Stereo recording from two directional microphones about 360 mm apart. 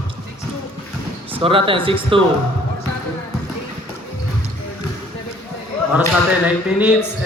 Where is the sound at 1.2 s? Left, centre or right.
Centre.